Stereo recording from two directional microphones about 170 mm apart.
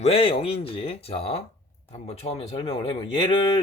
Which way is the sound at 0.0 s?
35° left (ahead or behind).